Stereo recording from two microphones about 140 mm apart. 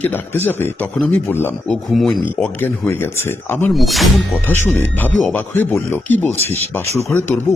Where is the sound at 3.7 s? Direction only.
Centre (ahead or behind).